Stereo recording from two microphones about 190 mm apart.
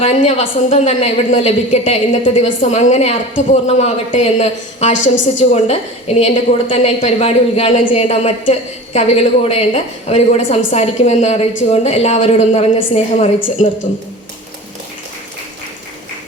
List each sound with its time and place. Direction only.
0.0 s a woman's voice: 30° left (ahead or behind)